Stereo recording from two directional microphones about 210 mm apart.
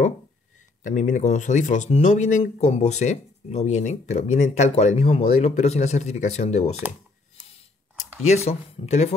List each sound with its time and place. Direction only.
0.8 s speech: 35° left (ahead or behind)
8.5 s speech: 30° left (ahead or behind)